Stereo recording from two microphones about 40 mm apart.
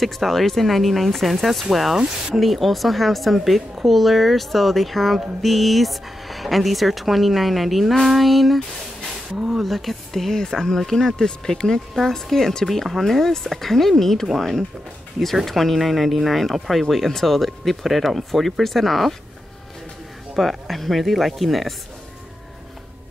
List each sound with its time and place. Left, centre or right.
0.0 s speech: centre
9.3 s speech: centre
9.6 s speech: centre
20.3 s speech: centre